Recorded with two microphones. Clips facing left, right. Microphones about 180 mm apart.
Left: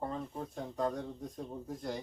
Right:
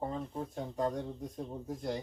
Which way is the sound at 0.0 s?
10° right (ahead or behind).